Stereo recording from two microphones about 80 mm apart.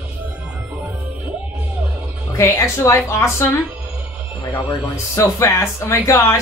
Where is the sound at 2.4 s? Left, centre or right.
Left.